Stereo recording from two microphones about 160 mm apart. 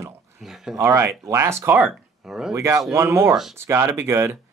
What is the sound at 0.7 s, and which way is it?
Speech, 15° right (ahead or behind).